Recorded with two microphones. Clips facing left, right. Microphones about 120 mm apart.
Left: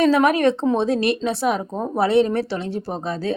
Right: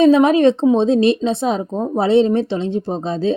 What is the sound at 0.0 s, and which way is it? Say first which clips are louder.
A woman's voice: right 5 dB; 20° right (ahead or behind).